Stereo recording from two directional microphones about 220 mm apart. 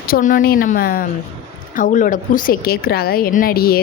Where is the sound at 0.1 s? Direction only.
35° left (ahead or behind).